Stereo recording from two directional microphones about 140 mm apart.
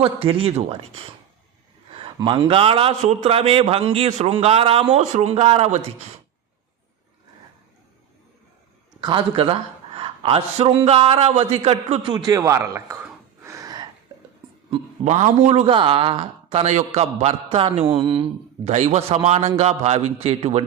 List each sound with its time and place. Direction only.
0.0 s a man's voice: 40° right (ahead or behind)
2.1 s a man's voice: 35° right (ahead or behind)
9.0 s a man's voice: 35° right (ahead or behind)
12.1 s a sound: 25° right (ahead or behind)
15.0 s a man's voice: 50° right (ahead or behind)
15.6 s a man's voice: 40° right (ahead or behind)
17.9 s a man's voice: 35° right (ahead or behind)
18.7 s a man's voice: 55° right (ahead or behind)